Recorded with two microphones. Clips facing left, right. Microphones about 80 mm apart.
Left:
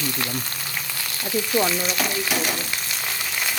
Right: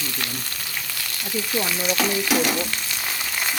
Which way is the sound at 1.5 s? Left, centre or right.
Centre.